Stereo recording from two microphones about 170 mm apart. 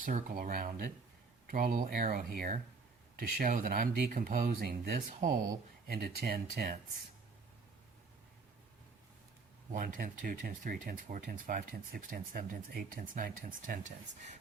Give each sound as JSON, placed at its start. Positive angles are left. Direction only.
{"t": 0.0, "sound": "speech", "side_deg": -55}
{"t": 9.7, "sound": "speech", "side_deg": -50}